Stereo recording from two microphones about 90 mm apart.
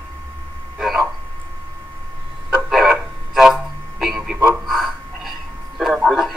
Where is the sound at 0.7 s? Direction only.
Centre (ahead or behind).